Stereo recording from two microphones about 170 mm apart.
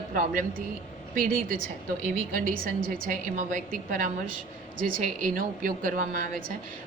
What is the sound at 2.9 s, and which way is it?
A woman's voice, 50° right (ahead or behind).